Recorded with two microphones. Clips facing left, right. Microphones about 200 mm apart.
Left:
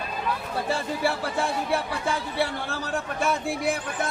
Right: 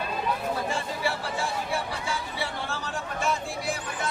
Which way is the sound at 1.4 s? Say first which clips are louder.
Left 7 dB; 60° left (ahead or behind).